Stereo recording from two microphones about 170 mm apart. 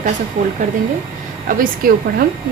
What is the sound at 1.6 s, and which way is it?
Speech, 55° right (ahead or behind).